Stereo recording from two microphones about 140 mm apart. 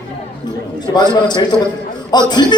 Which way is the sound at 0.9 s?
30° left (ahead or behind).